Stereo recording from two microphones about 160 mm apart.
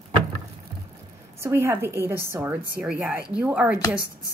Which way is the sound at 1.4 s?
15° right (ahead or behind).